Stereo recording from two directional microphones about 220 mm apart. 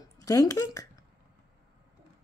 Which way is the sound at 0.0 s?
15° left (ahead or behind).